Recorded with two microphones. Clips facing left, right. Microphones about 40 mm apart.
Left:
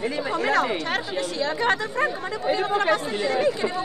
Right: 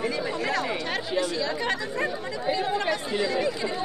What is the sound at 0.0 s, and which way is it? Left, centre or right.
Speech, left.